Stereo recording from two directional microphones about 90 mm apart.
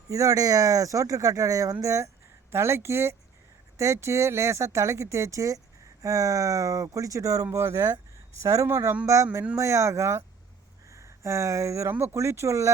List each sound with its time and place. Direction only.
0.1 s speech: 40° right (ahead or behind)